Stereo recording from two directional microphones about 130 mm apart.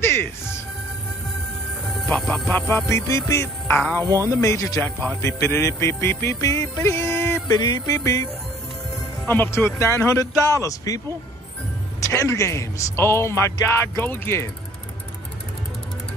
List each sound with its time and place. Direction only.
0.0 s music: 20° left (ahead or behind)
2.0 s speech: 5° left (ahead or behind)
2.5 s music: 20° left (ahead or behind)
3.8 s a man's voice: 5° left (ahead or behind)
4.3 s music: 25° left (ahead or behind)
4.8 s a man's voice: 10° left (ahead or behind)
5.2 s music: 20° left (ahead or behind)
9.3 s music: 15° left (ahead or behind)
12.1 s music: 25° left (ahead or behind)